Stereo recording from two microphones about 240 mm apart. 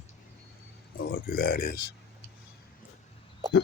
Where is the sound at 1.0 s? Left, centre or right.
Left.